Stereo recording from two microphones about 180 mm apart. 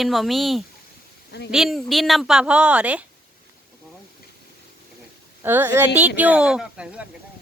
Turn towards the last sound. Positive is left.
turn(degrees=-5)  # may be behind; listen again after turning